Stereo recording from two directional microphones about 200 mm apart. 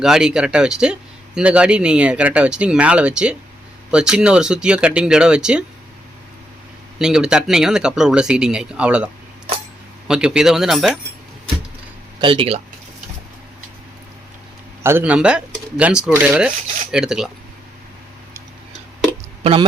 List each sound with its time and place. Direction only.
0.0 s speech: 5° right (ahead or behind)
7.0 s speech: 5° right (ahead or behind)
10.1 s speech: 5° right (ahead or behind)
12.2 s speech: 25° right (ahead or behind)
14.8 s speech: 10° right (ahead or behind)
19.4 s speech: 30° right (ahead or behind)